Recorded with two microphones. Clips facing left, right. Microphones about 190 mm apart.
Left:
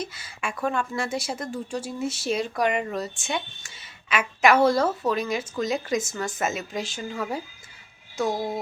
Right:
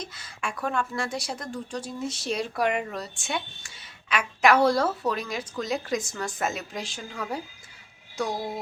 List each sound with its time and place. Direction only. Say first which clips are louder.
0.0 s a woman's voice: left 3 dB; 5° left (ahead or behind)
8.3 s music: left 6 dB; 20° left (ahead or behind)